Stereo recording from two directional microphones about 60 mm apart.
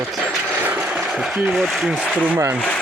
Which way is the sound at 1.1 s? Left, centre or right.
Centre.